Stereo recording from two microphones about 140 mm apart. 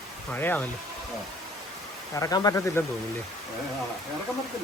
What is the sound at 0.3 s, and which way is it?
Speech, 15° left (ahead or behind).